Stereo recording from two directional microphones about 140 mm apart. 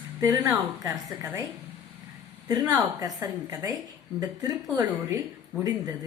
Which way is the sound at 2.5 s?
25° right (ahead or behind).